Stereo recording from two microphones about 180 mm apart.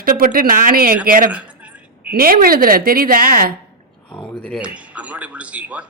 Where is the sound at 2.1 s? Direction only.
55° right (ahead or behind).